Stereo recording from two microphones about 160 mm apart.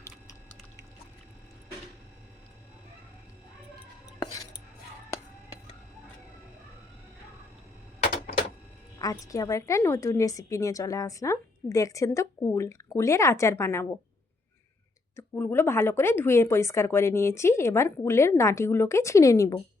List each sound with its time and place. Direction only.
4.2 s cutlery: 25° left (ahead or behind)
9.0 s a woman's voice: 20° left (ahead or behind)
15.1 s speech: 15° left (ahead or behind)